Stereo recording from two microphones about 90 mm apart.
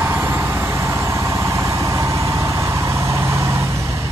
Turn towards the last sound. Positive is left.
turn(degrees=-30)  # may be behind; listen again after turning